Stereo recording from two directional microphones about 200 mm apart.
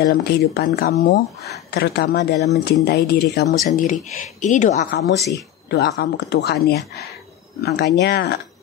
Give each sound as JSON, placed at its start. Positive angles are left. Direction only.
{"t": 0.0, "sound": "speech", "side_deg": 50}
{"t": 3.6, "sound": "speech", "side_deg": 40}
{"t": 4.9, "sound": "speech", "side_deg": 55}